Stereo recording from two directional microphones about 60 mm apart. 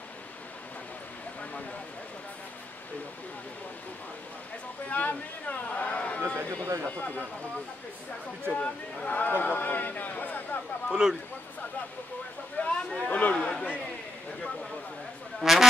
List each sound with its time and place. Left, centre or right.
4.8 s speech: left
8.5 s speech: centre
9.1 s speech: left
10.9 s speech: centre
12.5 s speech: centre
13.4 s speech: centre
15.4 s speech: centre